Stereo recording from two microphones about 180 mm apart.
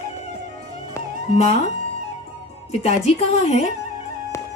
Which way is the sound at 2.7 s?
35° left (ahead or behind).